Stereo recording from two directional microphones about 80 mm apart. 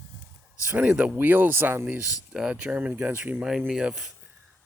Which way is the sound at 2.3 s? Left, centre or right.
Centre.